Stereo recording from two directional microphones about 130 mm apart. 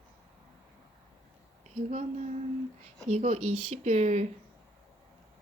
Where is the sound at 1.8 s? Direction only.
60° right (ahead or behind).